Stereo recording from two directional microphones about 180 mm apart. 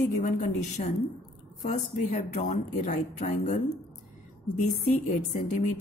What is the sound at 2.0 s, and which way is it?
Speech, 50° left (ahead or behind).